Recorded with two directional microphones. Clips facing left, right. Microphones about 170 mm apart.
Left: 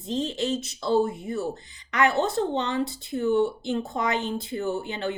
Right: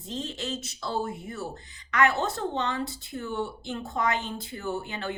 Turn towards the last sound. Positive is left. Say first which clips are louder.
# left 4 dB
turn(degrees=20)  # may be behind; listen again after turning